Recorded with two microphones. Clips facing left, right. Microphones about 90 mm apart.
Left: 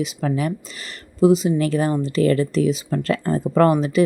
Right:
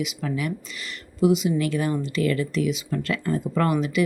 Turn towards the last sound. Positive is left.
turn(degrees=35)  # may be behind; listen again after turning